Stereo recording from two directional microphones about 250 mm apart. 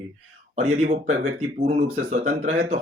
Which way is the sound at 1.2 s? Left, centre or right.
Right.